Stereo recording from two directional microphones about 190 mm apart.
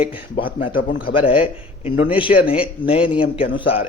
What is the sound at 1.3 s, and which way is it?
A man's voice, 30° left (ahead or behind).